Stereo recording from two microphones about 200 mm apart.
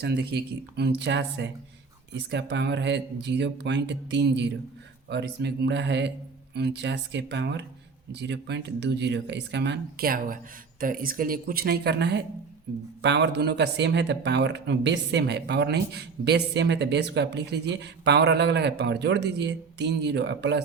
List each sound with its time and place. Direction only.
0.0 s speech: 55° right (ahead or behind)